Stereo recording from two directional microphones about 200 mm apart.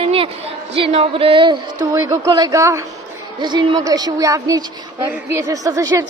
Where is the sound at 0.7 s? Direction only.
30° right (ahead or behind).